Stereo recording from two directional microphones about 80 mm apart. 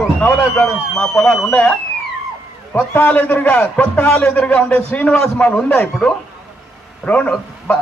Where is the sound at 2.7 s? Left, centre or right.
Left.